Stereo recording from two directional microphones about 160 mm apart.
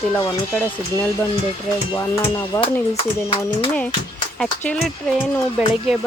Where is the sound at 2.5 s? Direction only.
20° left (ahead or behind).